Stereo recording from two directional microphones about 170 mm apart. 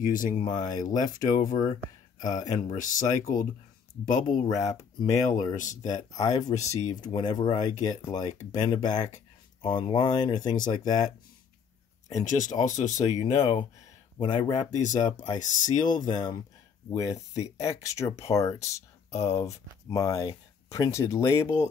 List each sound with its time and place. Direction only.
0.0 s speech: 55° left (ahead or behind)
6.1 s speech: 20° left (ahead or behind)
12.1 s speech: 45° left (ahead or behind)
13.4 s speech: 30° left (ahead or behind)
14.7 s speech: 45° left (ahead or behind)
16.1 s speech: 25° left (ahead or behind)
19.0 s speech: 40° left (ahead or behind)
19.3 s speech: 20° left (ahead or behind)